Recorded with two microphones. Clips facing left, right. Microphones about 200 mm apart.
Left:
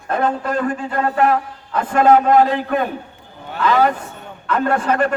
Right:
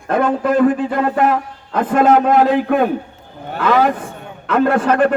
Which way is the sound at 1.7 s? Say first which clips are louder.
Right 4 dB; 55° right (ahead or behind).